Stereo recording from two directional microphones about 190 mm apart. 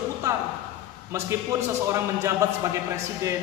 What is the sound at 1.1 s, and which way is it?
A man's voice, 15° right (ahead or behind).